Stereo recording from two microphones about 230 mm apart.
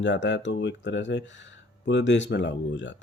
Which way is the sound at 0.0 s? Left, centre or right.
Left.